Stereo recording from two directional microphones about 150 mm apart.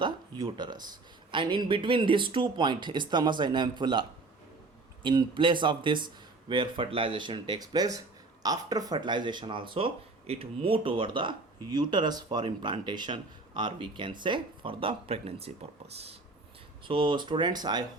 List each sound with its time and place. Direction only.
0.0 s speech: 30° right (ahead or behind)
5.0 s speech: 35° right (ahead or behind)
16.8 s speech: 35° right (ahead or behind)